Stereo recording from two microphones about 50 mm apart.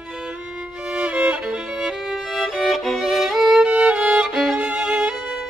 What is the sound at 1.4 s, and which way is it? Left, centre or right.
Music, centre.